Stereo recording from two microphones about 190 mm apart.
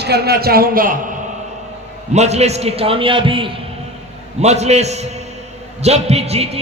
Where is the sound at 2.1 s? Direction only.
35° right (ahead or behind).